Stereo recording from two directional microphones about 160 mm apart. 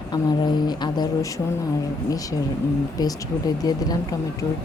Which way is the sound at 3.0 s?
25° left (ahead or behind).